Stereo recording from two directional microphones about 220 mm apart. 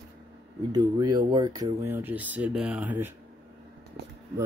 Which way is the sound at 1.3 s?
15° right (ahead or behind).